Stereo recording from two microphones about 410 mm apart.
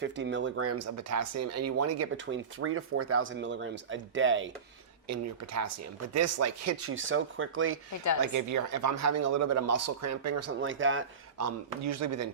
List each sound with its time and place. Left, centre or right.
0.0 s speech: right
5.0 s speech: right
8.2 s speech: right